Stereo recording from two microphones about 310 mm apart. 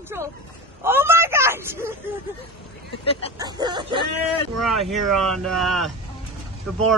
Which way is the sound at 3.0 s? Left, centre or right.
Centre.